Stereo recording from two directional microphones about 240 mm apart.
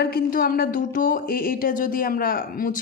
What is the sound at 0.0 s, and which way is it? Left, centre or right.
Speech, left.